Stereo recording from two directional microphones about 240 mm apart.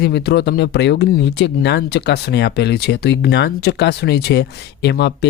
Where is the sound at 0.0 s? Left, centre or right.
Left.